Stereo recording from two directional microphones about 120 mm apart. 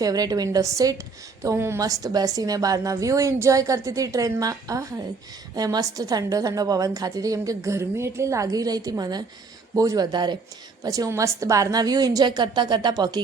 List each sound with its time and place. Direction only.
0.0 s a woman's voice: 30° right (ahead or behind)